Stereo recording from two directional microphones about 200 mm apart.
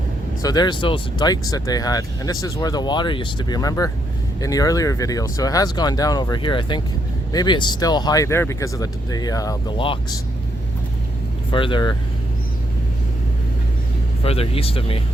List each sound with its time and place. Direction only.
0.4 s speech: 20° left (ahead or behind)
11.5 s speech: 25° left (ahead or behind)
14.3 s speech: 30° left (ahead or behind)